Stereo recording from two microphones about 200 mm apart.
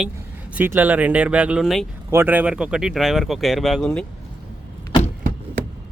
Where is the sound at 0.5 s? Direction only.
10° right (ahead or behind).